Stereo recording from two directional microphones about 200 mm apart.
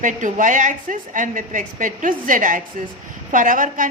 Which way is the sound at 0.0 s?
40° right (ahead or behind).